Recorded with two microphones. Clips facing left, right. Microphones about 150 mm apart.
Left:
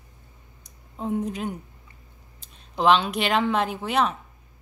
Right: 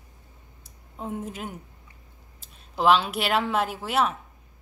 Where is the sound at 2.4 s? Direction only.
5° right (ahead or behind).